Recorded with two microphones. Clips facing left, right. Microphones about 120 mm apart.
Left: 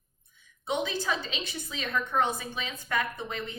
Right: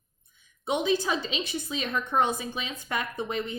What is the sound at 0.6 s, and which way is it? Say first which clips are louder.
A woman's voice: right 4 dB; 15° right (ahead or behind).